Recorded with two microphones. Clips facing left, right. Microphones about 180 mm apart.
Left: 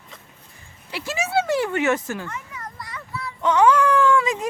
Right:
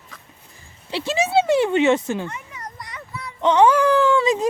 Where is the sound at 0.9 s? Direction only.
25° right (ahead or behind).